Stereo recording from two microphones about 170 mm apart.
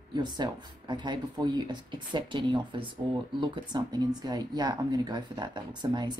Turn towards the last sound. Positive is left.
turn(degrees=-25)  # may be behind; listen again after turning